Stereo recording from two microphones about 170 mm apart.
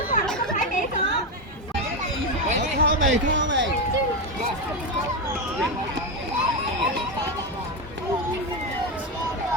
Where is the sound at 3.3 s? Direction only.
90° right.